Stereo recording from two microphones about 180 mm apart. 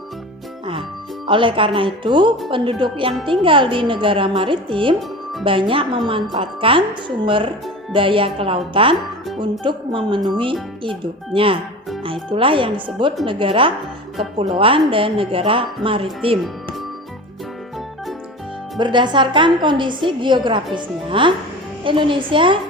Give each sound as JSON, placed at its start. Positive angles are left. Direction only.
{"t": 1.3, "sound": "a woman's voice", "side_deg": -30}
{"t": 4.9, "sound": "music", "side_deg": 0}
{"t": 5.5, "sound": "a woman's voice", "side_deg": -30}
{"t": 18.8, "sound": "a woman's voice", "side_deg": -25}